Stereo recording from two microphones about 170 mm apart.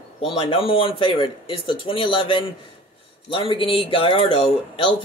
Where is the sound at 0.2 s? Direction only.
30° left (ahead or behind).